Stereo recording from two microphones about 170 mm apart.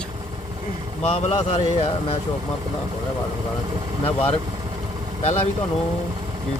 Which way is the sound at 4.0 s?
35° left (ahead or behind).